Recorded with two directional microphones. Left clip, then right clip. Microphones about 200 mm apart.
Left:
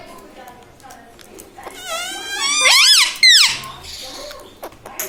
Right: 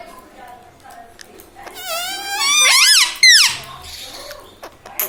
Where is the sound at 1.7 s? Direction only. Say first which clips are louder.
Right 2 dB; 30° right (ahead or behind).